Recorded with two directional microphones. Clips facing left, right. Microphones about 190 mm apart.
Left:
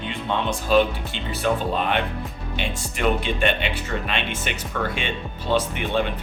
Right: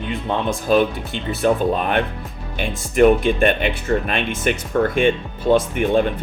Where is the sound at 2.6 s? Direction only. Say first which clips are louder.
Right 12 dB; 45° right (ahead or behind).